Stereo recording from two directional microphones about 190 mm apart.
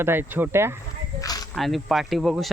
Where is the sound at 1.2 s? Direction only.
20° left (ahead or behind).